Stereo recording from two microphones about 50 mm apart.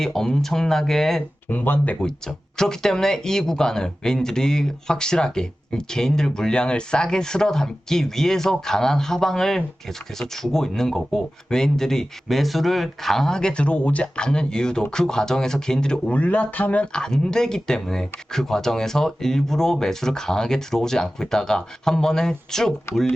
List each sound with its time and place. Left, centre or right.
0.0 s speech: centre
1.5 s speech: left
2.0 s speech: centre
16.0 s speech: left
16.9 s speech: centre